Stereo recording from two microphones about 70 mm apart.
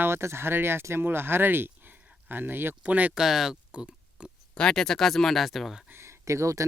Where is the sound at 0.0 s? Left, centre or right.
Right.